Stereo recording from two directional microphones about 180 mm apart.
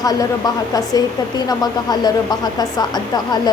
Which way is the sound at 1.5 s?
20° left (ahead or behind).